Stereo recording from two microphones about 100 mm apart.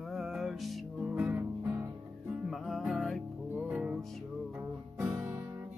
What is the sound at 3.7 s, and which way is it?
Music, 10° right (ahead or behind).